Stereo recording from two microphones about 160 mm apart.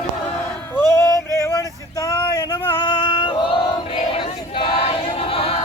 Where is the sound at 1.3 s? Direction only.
15° left (ahead or behind).